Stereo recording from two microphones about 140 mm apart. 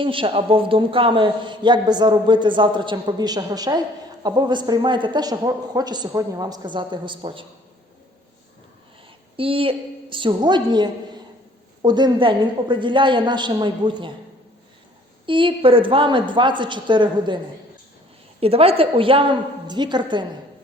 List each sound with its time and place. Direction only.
0.0 s a man's voice: 40° right (ahead or behind)
9.3 s a man's voice: 40° right (ahead or behind)
15.3 s a man's voice: 35° right (ahead or behind)